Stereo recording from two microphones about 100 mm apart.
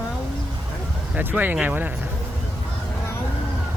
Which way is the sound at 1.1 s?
20° right (ahead or behind).